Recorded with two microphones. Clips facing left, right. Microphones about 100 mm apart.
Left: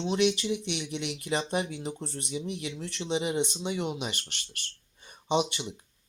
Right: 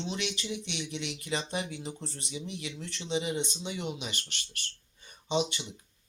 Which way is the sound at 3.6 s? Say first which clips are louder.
Left 5 dB; 30° left (ahead or behind).